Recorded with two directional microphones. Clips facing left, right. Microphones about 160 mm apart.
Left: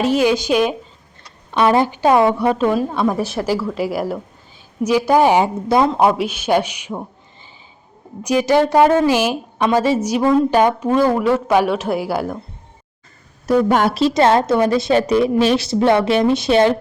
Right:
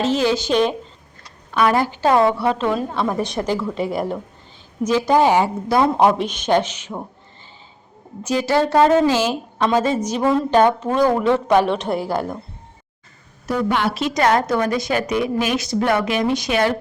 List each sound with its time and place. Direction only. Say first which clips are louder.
0.0 s a woman's voice: left 3 dB; 15° left (ahead or behind)
1.5 s a woman's voice: left 3 dB; 25° left (ahead or behind)
6.0 s a woman's voice: left 1 dB; 5° left (ahead or behind)
8.2 s a woman's voice: left 4 dB; 15° left (ahead or behind)
13.5 s a woman's voice: left 5 dB; 45° left (ahead or behind)
14.1 s speech: left 1 dB; 25° left (ahead or behind)